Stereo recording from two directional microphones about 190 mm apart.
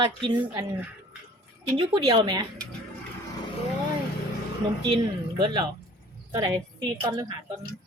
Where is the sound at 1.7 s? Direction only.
25° right (ahead or behind).